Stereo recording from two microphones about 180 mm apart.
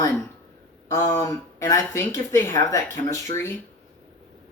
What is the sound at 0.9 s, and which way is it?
Speech, 15° left (ahead or behind).